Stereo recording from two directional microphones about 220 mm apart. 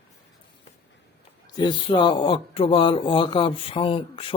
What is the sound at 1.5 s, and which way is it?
A man's voice, 20° left (ahead or behind).